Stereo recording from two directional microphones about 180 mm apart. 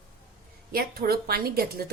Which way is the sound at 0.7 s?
55° right (ahead or behind).